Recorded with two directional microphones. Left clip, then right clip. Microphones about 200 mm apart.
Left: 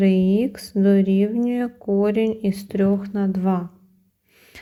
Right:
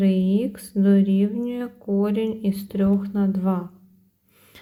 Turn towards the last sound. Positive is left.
turn(degrees=25)  # may be behind; listen again after turning